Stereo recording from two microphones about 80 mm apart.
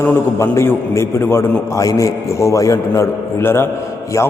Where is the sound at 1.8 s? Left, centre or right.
Left.